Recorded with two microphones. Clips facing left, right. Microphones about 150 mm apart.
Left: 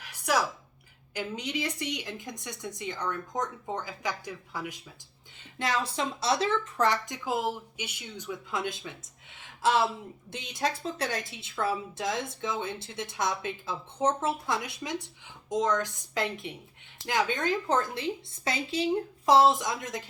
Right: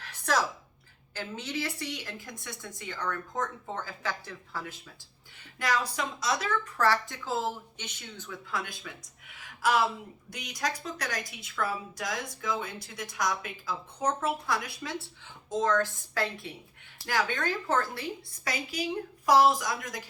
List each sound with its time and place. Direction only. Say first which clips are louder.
0.0 s a sound: left 1 dB; 10° left (ahead or behind)
1.1 s a woman's voice: left 2 dB; 15° left (ahead or behind)
5.4 s a woman's voice: even; 25° left (ahead or behind)